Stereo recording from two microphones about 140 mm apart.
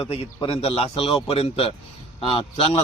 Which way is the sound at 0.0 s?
35° left (ahead or behind).